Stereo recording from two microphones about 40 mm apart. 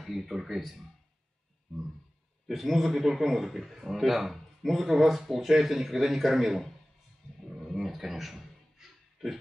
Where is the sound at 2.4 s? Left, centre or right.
Centre.